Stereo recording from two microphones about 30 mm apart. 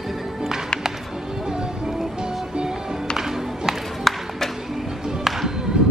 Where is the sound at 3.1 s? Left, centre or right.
Centre.